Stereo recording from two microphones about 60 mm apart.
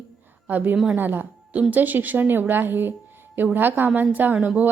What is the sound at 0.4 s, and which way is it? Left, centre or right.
A woman's voice, right.